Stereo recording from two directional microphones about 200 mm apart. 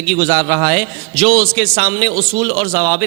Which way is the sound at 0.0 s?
5° left (ahead or behind).